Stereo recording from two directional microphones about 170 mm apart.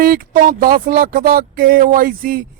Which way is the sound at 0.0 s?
55° right (ahead or behind).